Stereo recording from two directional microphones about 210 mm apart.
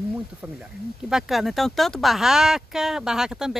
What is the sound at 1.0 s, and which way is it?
Speech, centre (ahead or behind).